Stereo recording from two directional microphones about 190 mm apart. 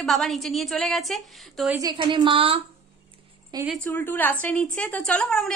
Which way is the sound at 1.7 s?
20° right (ahead or behind).